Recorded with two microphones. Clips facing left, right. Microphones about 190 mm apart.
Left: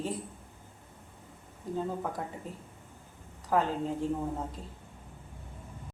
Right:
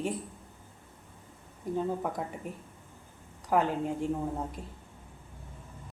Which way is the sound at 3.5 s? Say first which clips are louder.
Right 1 dB; 15° right (ahead or behind).